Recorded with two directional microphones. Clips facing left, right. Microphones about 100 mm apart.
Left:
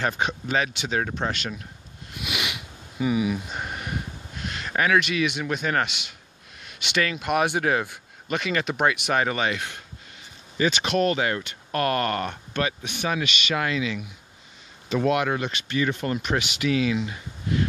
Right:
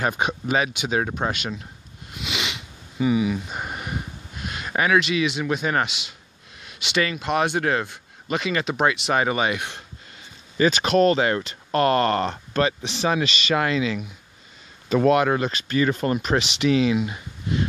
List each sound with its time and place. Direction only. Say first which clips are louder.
0.0 s speech: right 2 dB; 10° right (ahead or behind)
2.2 s sniff: right 1 dB; 5° left (ahead or behind)
3.5 s a sound: right 1 dB; 10° right (ahead or behind)
4.4 s a man's voice: right 1 dB; 10° right (ahead or behind)
7.2 s speech: left 1 dB; 10° left (ahead or behind)
8.3 s speech: right 2 dB; 5° right (ahead or behind)
9.2 s speech: right 2 dB; 10° right (ahead or behind)
10.6 s speech: right 5 dB; 40° right (ahead or behind)